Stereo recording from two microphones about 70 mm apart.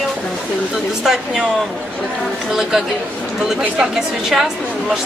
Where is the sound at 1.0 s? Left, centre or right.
Centre.